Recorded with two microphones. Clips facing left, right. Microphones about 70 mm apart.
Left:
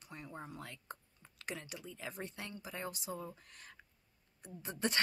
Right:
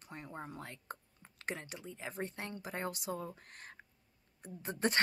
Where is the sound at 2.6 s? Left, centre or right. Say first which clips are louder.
Right 4 dB; right.